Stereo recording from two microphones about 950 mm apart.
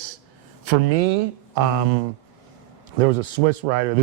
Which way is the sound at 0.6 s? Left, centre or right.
Right.